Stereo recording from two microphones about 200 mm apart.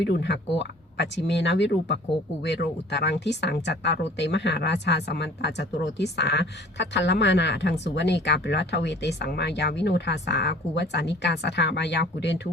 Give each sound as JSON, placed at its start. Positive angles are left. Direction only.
{"t": 0.0, "sound": "speech", "side_deg": 60}